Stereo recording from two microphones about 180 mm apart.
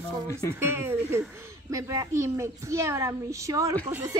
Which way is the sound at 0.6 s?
15° right (ahead or behind).